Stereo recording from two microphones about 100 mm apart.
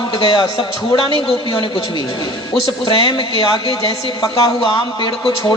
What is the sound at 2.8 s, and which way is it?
Speech, 60° left (ahead or behind).